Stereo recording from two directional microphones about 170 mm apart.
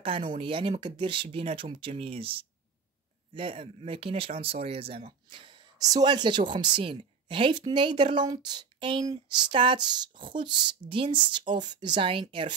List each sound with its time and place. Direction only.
0.0 s speech: 30° right (ahead or behind)